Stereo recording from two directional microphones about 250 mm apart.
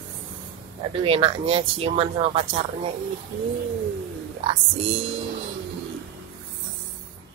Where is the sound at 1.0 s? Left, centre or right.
Right.